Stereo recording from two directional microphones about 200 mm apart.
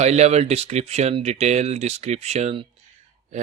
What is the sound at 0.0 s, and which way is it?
Speech, 35° right (ahead or behind).